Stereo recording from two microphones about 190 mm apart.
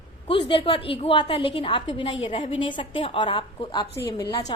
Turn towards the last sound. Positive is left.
turn(degrees=20)  # may be behind; listen again after turning